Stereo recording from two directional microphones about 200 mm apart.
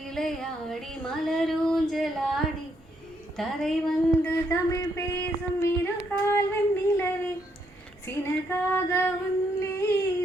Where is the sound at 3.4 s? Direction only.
Centre (ahead or behind).